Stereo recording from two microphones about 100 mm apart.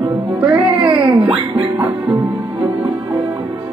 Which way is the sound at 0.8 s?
55° right (ahead or behind).